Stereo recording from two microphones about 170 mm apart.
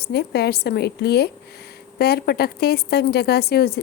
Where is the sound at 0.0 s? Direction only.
70° left (ahead or behind).